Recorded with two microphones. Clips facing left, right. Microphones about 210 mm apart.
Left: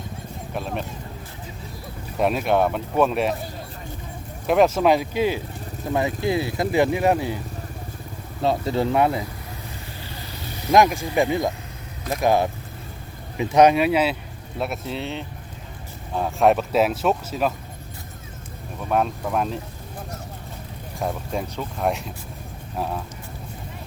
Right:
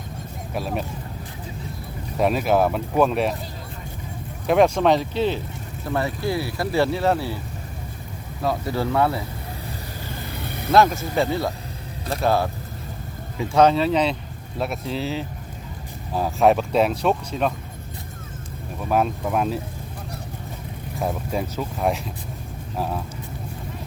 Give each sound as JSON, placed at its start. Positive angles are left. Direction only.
{"t": 0.5, "sound": "speech", "side_deg": -5}
{"t": 2.1, "sound": "speech", "side_deg": 0}
{"t": 4.4, "sound": "speech", "side_deg": 0}
{"t": 8.4, "sound": "speech", "side_deg": 25}
{"t": 10.1, "sound": "vehicle", "side_deg": -55}
{"t": 10.7, "sound": "speech", "side_deg": 15}
{"t": 18.9, "sound": "speech", "side_deg": -5}
{"t": 21.0, "sound": "speech", "side_deg": 0}